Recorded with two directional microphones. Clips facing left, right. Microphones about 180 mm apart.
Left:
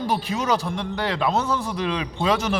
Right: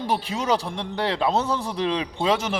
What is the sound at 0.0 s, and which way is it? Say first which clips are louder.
A man's voice: left 1 dB; 30° right (ahead or behind).